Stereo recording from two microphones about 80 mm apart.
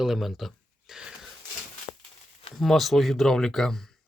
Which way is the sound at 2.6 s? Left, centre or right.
Centre.